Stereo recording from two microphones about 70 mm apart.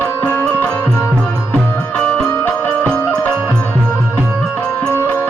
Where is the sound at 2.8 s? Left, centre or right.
Centre.